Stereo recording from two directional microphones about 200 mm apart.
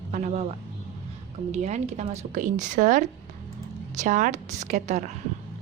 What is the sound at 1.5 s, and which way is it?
Speech, 30° right (ahead or behind).